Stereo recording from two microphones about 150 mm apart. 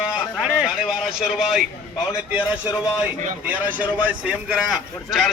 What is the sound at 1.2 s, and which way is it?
A man's voice, 5° right (ahead or behind).